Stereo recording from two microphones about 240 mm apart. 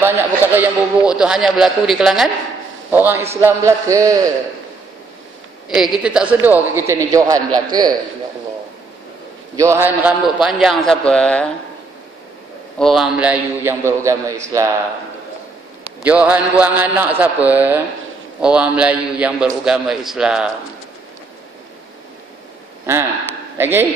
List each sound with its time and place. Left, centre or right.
0.0 s a man's voice: centre
5.7 s a man's voice: centre
9.6 s a man's voice: centre
12.7 s a man's voice: centre
16.0 s a man's voice: centre
23.6 s a man's voice: centre